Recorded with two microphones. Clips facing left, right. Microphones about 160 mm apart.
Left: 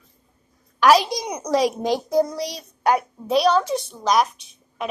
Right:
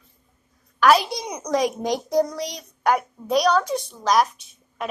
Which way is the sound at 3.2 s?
25° left (ahead or behind).